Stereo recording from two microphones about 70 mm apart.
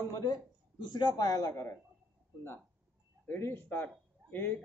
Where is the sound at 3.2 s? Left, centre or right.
Left.